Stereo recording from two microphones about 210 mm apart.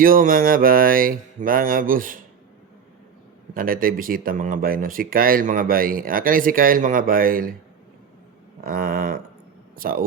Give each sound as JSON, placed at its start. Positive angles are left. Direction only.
{"t": 0.0, "sound": "speech", "side_deg": -40}
{"t": 3.5, "sound": "speech", "side_deg": -40}
{"t": 8.6, "sound": "a sound", "side_deg": -45}
{"t": 9.7, "sound": "speech", "side_deg": -45}